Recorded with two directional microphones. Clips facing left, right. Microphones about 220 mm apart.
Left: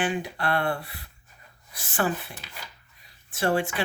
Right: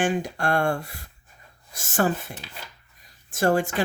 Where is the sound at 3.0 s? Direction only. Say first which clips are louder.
Right 4 dB; 45° right (ahead or behind).